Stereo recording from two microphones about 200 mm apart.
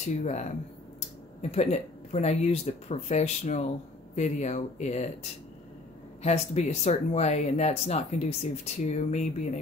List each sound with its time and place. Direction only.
0.0 s speech: 35° left (ahead or behind)
6.2 s speech: 35° left (ahead or behind)